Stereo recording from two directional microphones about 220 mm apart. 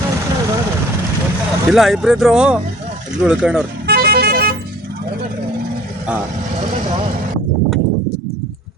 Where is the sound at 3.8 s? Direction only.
45° right (ahead or behind).